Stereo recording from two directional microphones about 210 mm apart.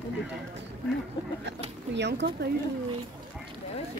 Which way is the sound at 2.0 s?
55° right (ahead or behind).